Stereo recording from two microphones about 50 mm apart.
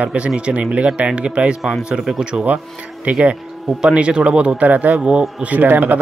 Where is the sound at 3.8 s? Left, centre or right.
Centre.